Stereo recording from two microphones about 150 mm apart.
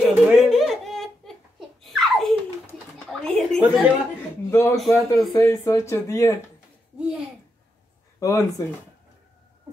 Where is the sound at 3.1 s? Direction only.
5° left (ahead or behind).